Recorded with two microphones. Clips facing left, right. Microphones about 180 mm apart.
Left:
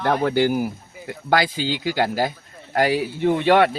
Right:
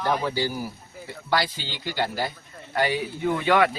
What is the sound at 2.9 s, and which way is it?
Speech, 90° left.